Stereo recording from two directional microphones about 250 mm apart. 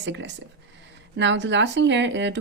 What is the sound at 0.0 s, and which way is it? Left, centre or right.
Speech, right.